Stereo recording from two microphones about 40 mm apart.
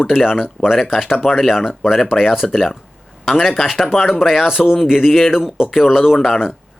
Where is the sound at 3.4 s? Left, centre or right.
Centre.